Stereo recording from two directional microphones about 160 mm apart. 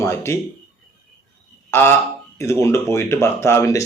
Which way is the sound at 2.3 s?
15° left (ahead or behind).